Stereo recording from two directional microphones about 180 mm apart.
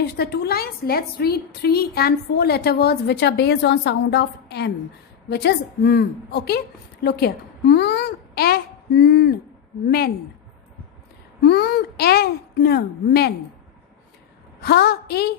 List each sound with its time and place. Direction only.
0.0 s a woman's voice: 65° left (ahead or behind)
11.4 s a woman's voice: 65° left (ahead or behind)
14.6 s a woman's voice: 65° left (ahead or behind)